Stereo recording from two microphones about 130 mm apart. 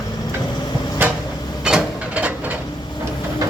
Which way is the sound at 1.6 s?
10° right (ahead or behind).